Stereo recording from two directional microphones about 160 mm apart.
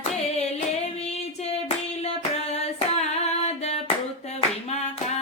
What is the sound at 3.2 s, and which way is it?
Music, 40° left (ahead or behind).